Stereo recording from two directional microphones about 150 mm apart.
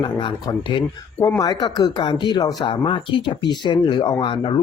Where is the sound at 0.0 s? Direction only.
30° left (ahead or behind).